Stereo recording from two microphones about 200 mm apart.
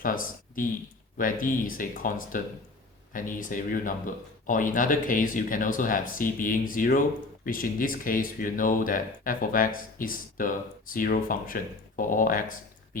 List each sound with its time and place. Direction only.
0.0 s speech: 45° left (ahead or behind)